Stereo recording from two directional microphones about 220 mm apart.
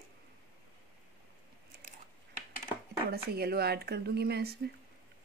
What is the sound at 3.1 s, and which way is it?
A woman's voice, 45° right (ahead or behind).